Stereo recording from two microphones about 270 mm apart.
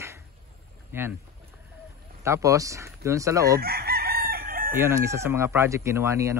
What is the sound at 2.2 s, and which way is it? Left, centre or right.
Speech, centre.